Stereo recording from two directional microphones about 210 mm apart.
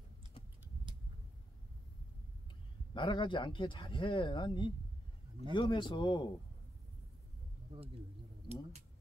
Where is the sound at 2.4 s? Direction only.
20° left (ahead or behind).